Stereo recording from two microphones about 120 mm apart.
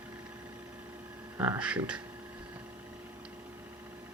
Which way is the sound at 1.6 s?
10° right (ahead or behind).